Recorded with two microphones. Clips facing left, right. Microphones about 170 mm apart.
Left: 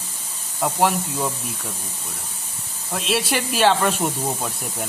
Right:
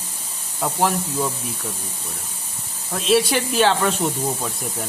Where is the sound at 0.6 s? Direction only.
5° left (ahead or behind).